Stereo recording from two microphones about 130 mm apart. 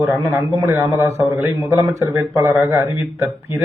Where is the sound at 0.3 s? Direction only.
25° right (ahead or behind).